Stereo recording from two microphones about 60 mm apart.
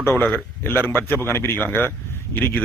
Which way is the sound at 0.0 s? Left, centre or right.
Left.